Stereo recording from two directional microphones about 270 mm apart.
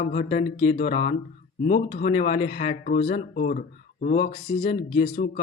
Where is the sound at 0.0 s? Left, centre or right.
Left.